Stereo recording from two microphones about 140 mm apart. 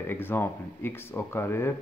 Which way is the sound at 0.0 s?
15° left (ahead or behind).